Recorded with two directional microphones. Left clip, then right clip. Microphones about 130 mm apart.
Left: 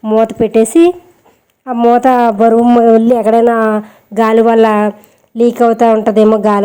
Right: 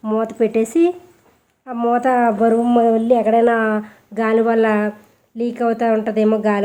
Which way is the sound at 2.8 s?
65° left (ahead or behind).